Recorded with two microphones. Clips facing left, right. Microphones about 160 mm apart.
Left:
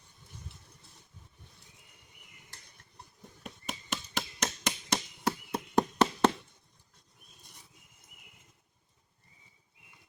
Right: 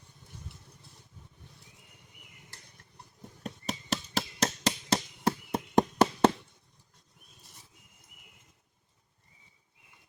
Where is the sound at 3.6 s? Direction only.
40° right (ahead or behind).